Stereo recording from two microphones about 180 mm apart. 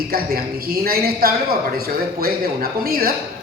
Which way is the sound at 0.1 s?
55° right (ahead or behind).